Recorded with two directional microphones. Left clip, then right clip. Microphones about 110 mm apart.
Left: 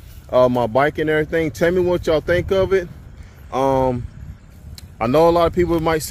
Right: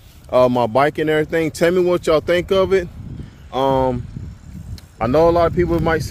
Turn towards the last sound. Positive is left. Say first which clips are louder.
# even
turn(degrees=15)  # may be behind; listen again after turning